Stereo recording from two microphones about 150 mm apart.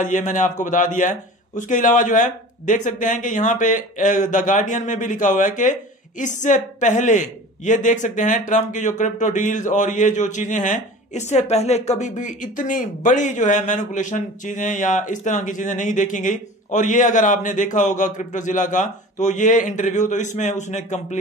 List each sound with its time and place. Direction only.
0.0 s a man's voice: 60° left (ahead or behind)